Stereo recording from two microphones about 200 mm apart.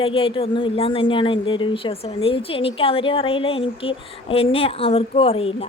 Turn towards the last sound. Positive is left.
turn(degrees=30)  # may be behind; listen again after turning